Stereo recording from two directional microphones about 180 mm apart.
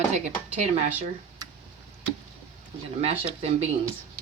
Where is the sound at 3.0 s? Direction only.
35° right (ahead or behind).